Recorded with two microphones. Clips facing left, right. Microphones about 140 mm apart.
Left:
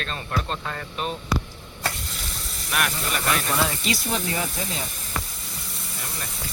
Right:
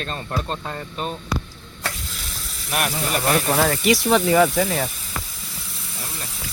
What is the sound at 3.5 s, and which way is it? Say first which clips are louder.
Speech: right 7 dB; 60° right (ahead or behind).